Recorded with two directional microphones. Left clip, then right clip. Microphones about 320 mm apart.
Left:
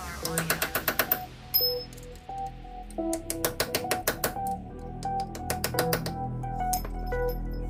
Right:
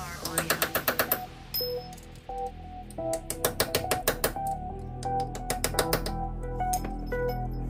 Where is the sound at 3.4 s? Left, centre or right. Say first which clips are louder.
Right 2 dB; centre.